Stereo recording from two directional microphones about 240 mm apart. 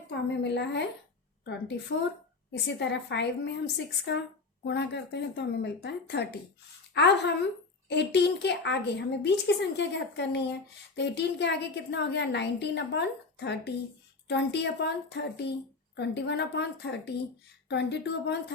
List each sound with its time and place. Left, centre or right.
0.3 s a woman's voice: left
2.5 s a woman's voice: left